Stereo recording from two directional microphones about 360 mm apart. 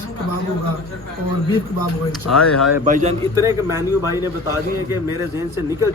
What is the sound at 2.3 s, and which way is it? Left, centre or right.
Speech, left.